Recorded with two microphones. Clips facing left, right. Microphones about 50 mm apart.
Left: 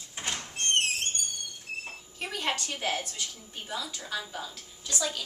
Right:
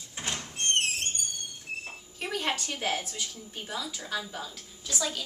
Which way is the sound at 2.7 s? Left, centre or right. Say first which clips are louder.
Even; centre.